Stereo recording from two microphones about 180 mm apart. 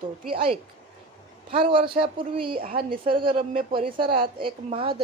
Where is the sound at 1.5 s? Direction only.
30° right (ahead or behind).